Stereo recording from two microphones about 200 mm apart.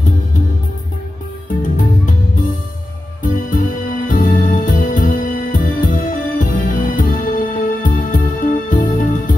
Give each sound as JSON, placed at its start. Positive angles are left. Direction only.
{"t": 1.8, "sound": "music", "side_deg": 40}